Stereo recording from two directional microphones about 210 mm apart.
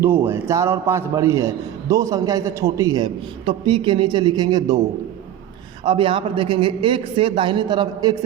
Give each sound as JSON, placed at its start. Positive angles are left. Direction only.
{"t": 0.3, "sound": "a man's voice", "side_deg": -15}
{"t": 5.8, "sound": "a man's voice", "side_deg": -25}